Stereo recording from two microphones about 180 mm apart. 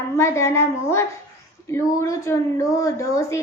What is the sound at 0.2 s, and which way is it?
A woman's voice, 15° left (ahead or behind).